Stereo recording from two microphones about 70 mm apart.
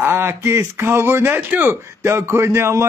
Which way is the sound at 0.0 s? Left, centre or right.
Right.